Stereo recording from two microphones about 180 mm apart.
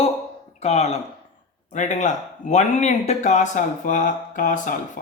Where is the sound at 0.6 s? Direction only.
35° left (ahead or behind).